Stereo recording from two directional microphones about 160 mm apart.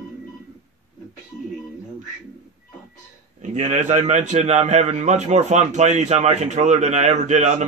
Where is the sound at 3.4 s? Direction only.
45° right (ahead or behind).